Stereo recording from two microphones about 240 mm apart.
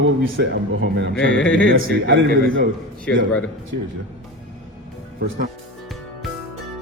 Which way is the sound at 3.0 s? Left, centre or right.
Centre.